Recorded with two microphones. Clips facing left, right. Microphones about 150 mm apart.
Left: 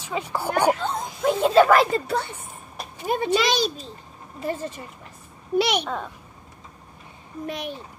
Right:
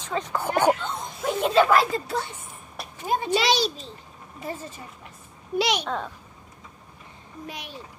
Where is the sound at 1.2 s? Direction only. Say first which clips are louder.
Left 4 dB; 30° left (ahead or behind).